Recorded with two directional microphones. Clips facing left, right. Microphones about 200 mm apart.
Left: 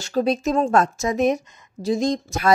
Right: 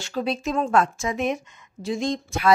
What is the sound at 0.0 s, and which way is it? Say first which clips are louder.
A woman's voice: left 5 dB; 40° left (ahead or behind).